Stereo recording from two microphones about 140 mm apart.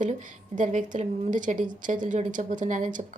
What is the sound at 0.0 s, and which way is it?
Speech, 65° right (ahead or behind).